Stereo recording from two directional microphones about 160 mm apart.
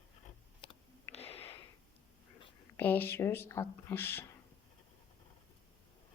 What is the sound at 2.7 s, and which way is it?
Speech, 10° left (ahead or behind).